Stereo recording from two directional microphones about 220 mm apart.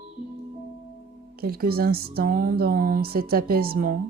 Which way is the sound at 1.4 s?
45° right (ahead or behind).